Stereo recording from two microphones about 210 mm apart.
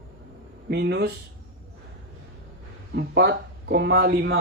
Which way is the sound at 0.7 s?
50° right (ahead or behind).